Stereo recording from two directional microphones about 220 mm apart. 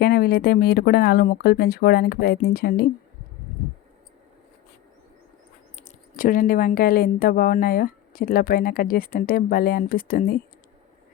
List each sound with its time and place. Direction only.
0.0 s speech: 45° left (ahead or behind)
5.7 s speech: 35° left (ahead or behind)